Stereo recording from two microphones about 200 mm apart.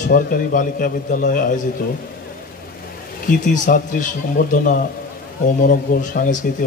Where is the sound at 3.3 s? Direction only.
40° left (ahead or behind).